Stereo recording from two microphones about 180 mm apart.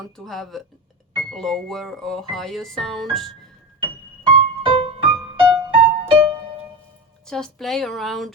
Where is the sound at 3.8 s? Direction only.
30° right (ahead or behind).